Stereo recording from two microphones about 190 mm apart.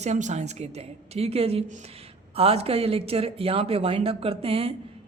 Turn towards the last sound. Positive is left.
turn(degrees=-30)  # may be behind; listen again after turning